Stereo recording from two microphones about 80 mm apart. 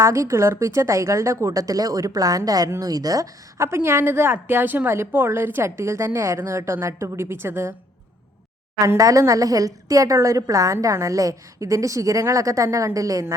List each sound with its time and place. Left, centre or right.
0.0 s a woman's voice: right
2.6 s a woman's voice: right
2.9 s a woman's voice: right
3.6 s a woman's voice: right
9.0 s a woman's voice: right